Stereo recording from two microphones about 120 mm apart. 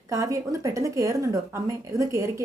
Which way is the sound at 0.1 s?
25° right (ahead or behind).